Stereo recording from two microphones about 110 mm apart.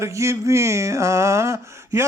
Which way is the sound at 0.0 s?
25° right (ahead or behind).